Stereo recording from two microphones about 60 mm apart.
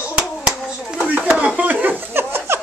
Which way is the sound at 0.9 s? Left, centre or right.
Right.